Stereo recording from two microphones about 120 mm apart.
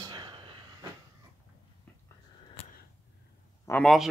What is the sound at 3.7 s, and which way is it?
Speech, 25° left (ahead or behind).